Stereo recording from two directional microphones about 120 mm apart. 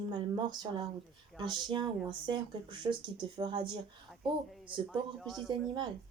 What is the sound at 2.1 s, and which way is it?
Speech, 40° right (ahead or behind).